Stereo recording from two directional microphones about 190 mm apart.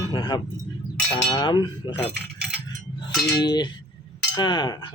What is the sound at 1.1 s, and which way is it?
Speech, 25° left (ahead or behind).